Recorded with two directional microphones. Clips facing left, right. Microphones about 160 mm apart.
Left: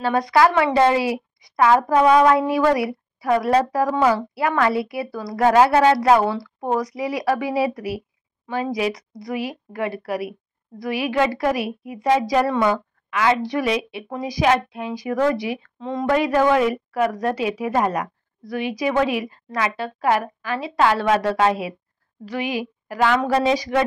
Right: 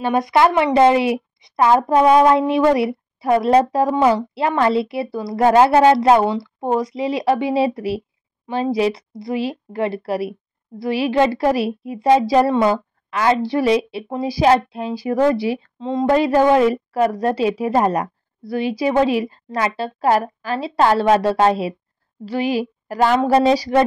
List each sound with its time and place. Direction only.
0.0 s a woman's voice: 20° right (ahead or behind)